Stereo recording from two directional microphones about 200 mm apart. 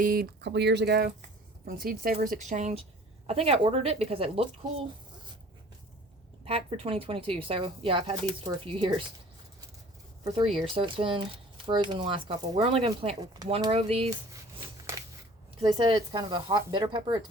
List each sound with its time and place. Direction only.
0.0 s a woman's voice: 45° right (ahead or behind); by 4.9 s 30° right (ahead or behind)
6.4 s speech: 30° right (ahead or behind)
10.2 s speech: 25° right (ahead or behind)
15.6 s speech: 25° right (ahead or behind)